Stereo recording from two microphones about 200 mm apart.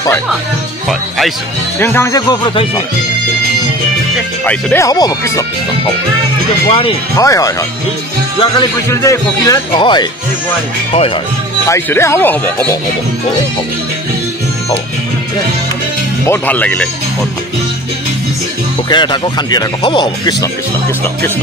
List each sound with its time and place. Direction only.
0.8 s speech: centre (ahead or behind)
1.8 s speech: 10° left (ahead or behind)
4.5 s speech: 5° left (ahead or behind)
4.8 s speech: 20° left (ahead or behind)
6.7 s speech: 25° left (ahead or behind)
7.2 s speech: 15° left (ahead or behind)
11.6 s speech: 15° left (ahead or behind)
16.3 s speech: 10° left (ahead or behind)
18.9 s speech: 20° left (ahead or behind)